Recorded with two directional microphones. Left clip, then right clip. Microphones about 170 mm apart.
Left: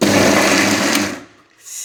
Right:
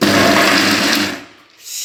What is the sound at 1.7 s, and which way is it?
Rub, 60° left (ahead or behind).